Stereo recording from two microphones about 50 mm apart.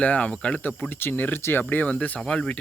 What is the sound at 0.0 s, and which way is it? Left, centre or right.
Speech, left.